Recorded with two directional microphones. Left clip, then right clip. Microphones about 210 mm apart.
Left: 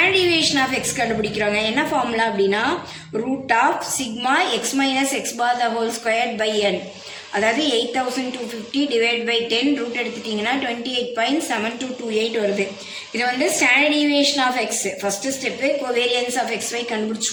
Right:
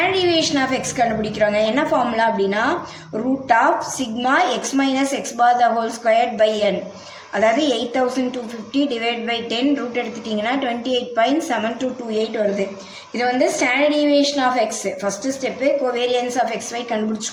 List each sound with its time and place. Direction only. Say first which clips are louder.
0.0 s a woman's voice: left 1 dB; 45° right (ahead or behind)
4.3 s a woman's voice: right 2 dB; 45° right (ahead or behind)